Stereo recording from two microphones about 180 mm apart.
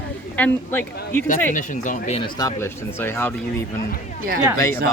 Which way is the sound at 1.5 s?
45° left (ahead or behind).